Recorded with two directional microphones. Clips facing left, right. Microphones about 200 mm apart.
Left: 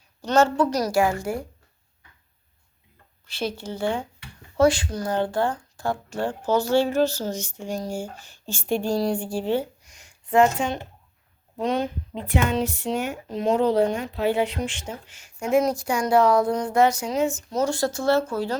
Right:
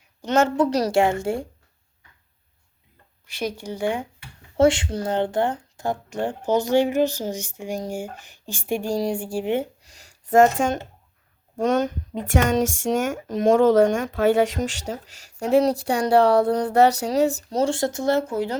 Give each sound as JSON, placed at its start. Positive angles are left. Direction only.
{"t": 0.2, "sound": "speech", "side_deg": -20}
{"t": 3.2, "sound": "speech", "side_deg": -15}
{"t": 9.9, "sound": "speech", "side_deg": -40}